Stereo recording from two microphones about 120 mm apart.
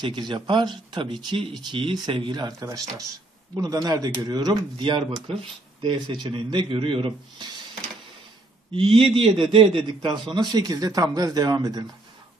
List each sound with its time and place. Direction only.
0.0 s speech: 40° right (ahead or behind)
3.5 s a man's voice: 30° right (ahead or behind); by 7.4 s 45° right (ahead or behind)
8.7 s a man's voice: 50° right (ahead or behind)
10.3 s speech: 35° right (ahead or behind)